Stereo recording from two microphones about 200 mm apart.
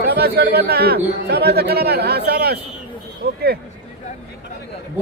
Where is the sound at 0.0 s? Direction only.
55° right (ahead or behind).